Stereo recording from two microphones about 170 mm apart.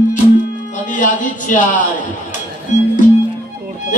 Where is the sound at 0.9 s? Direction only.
50° left (ahead or behind).